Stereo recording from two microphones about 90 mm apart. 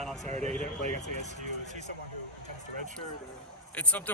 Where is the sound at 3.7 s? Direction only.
15° left (ahead or behind).